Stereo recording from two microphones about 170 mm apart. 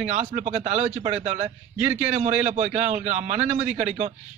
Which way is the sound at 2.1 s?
40° right (ahead or behind).